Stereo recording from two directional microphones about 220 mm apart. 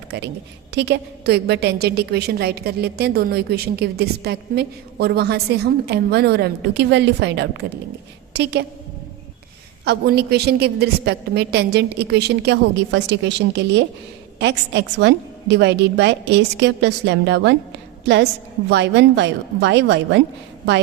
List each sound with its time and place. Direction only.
0.7 s a woman's voice: 50° right (ahead or behind)
9.8 s a woman's voice: 45° right (ahead or behind)